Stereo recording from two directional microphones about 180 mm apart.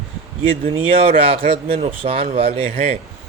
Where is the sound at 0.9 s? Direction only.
30° right (ahead or behind).